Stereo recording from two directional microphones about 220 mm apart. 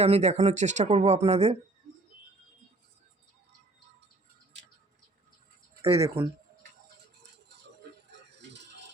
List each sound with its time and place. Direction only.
0.0 s speech: 30° right (ahead or behind)
6.0 s speech: 20° right (ahead or behind)
8.4 s a sound: 50° right (ahead or behind)